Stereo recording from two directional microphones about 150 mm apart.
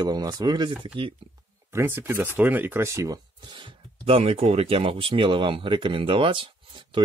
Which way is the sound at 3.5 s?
35° right (ahead or behind).